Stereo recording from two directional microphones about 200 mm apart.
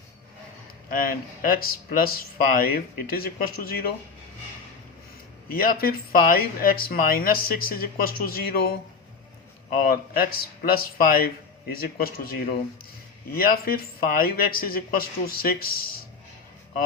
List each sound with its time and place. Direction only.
0.9 s speech: 45° left (ahead or behind)
5.5 s speech: 50° left (ahead or behind)
9.8 s speech: 50° left (ahead or behind)